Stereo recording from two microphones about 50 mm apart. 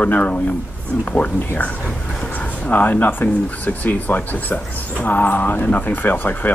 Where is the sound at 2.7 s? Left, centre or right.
Left.